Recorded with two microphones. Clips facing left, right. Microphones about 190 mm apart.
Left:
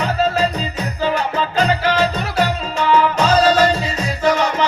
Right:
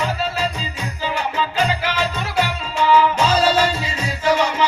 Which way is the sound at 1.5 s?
40° left (ahead or behind).